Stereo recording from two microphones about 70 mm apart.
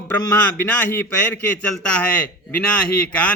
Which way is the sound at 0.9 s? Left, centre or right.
Left.